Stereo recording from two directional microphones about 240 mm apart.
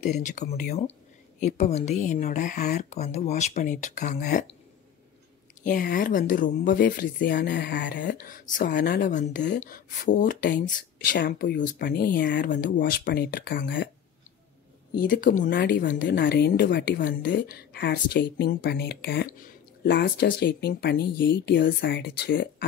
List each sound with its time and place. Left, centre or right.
0.0 s speech: left
5.6 s speech: left
15.0 s speech: left